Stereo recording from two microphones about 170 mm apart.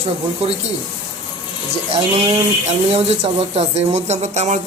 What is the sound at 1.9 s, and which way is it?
Speech, 40° right (ahead or behind).